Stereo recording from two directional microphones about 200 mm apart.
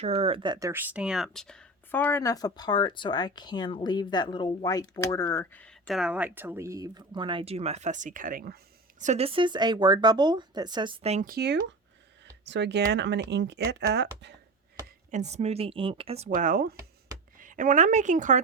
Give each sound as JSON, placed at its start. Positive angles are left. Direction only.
{"t": 0.0, "sound": "speech", "side_deg": -30}
{"t": 0.7, "sound": "speech", "side_deg": -10}
{"t": 9.0, "sound": "speech", "side_deg": -35}
{"t": 11.3, "sound": "speech", "side_deg": -55}
{"t": 15.1, "sound": "speech", "side_deg": -35}